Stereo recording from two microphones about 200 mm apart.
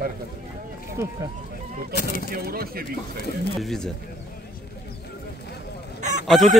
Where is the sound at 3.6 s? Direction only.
Centre (ahead or behind).